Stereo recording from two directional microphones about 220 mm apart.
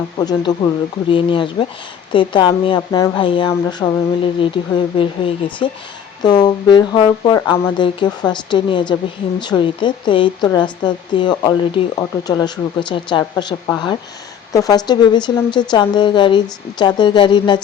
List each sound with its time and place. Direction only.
0.2 s a woman's voice: 20° left (ahead or behind)